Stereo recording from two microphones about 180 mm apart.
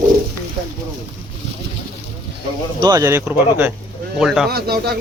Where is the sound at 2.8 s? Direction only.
20° right (ahead or behind); by 4.4 s centre (ahead or behind).